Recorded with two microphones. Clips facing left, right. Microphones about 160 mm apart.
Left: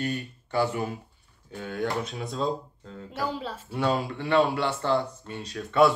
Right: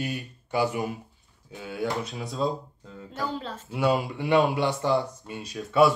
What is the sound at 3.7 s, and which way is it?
Speech, 10° right (ahead or behind).